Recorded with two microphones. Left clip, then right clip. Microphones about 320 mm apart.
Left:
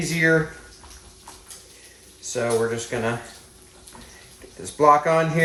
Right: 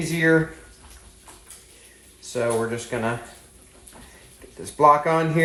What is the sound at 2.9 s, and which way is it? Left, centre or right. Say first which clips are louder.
Speech: even; centre.